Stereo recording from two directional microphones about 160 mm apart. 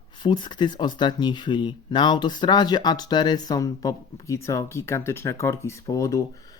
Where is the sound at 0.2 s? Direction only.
30° left (ahead or behind).